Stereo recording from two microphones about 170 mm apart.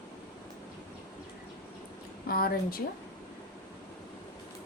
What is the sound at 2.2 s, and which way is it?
Speech, 60° left (ahead or behind).